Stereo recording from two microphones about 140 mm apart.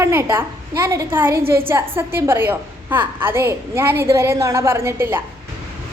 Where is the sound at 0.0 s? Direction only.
20° right (ahead or behind).